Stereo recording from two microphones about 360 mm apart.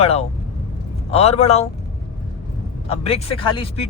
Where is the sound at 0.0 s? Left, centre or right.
Centre.